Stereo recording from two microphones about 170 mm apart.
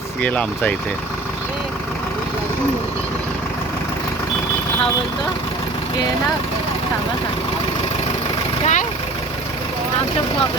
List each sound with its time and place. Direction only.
0.2 s speech: 10° left (ahead or behind)
8.6 s speech: 45° left (ahead or behind)